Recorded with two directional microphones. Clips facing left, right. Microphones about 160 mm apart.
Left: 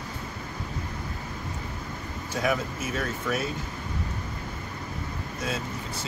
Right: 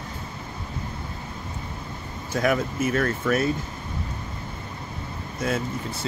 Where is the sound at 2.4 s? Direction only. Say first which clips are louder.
Right 5 dB; 60° right (ahead or behind).